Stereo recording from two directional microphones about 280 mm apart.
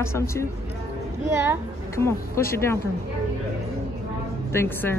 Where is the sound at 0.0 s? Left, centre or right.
Centre.